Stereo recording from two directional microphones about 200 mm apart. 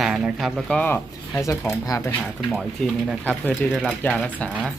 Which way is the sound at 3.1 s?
5° left (ahead or behind).